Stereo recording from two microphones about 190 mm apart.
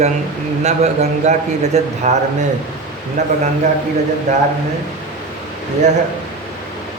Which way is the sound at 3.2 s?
40° right (ahead or behind).